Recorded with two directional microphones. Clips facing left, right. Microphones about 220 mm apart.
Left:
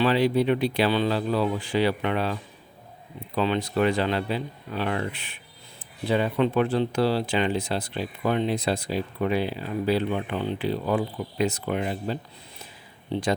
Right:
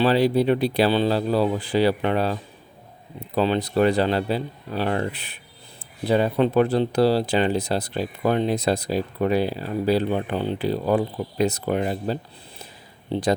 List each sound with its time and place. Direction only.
0.0 s speech: 35° right (ahead or behind)